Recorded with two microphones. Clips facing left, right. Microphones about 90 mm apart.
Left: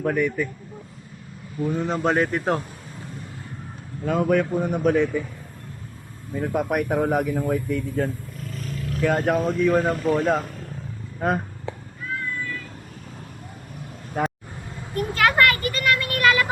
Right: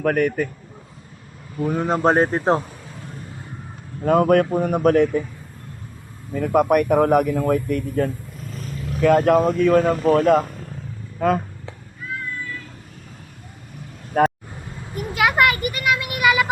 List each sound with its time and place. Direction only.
0.0 s speech: 65° right (ahead or behind)
1.6 s speech: 60° right (ahead or behind)
1.9 s speech: 40° right (ahead or behind)
4.0 s speech: 55° right (ahead or behind)
6.3 s speech: 70° right (ahead or behind)
14.2 s speech: 60° right (ahead or behind)
14.9 s vehicle: 10° right (ahead or behind)